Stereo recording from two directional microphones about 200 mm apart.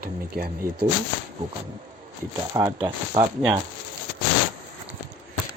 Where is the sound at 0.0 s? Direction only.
50° right (ahead or behind).